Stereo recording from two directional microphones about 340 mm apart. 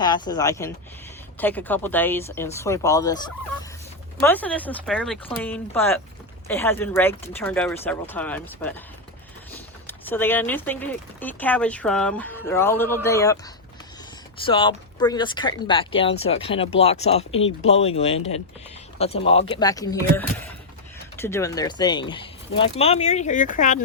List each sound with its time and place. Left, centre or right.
0.0 s speech: centre
4.2 s speech: centre
14.4 s speech: centre